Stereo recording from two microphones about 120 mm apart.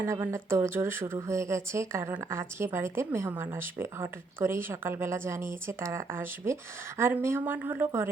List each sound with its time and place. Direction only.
0.0 s speech: 20° right (ahead or behind)